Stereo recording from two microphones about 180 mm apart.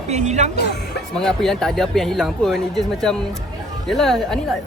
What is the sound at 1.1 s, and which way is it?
Speech, 5° left (ahead or behind).